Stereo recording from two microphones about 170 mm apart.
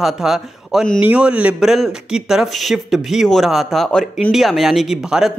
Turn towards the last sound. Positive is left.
turn(degrees=-5)  # may be behind; listen again after turning